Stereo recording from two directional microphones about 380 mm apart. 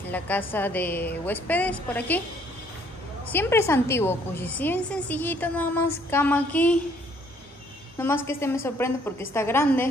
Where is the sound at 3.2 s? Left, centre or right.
Centre.